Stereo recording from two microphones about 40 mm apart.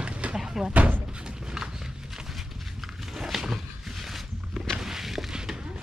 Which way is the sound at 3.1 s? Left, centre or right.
Centre.